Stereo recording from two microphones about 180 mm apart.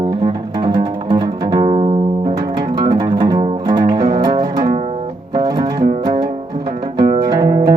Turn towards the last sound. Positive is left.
turn(degrees=-25)  # may be behind; listen again after turning